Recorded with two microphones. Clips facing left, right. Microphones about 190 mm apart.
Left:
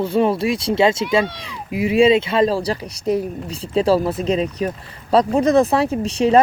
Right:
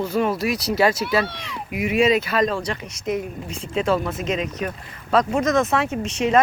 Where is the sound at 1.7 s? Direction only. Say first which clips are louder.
Left 5 dB; 30° left (ahead or behind).